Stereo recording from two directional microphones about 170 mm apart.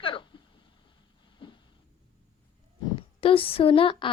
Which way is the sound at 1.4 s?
30° left (ahead or behind).